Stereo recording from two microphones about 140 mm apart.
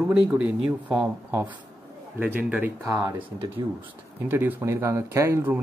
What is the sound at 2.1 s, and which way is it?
Speech, 10° right (ahead or behind).